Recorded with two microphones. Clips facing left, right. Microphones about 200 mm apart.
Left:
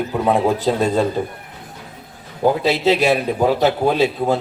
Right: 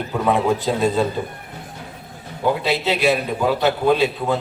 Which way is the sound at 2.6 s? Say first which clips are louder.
Left 3 dB; 40° left (ahead or behind).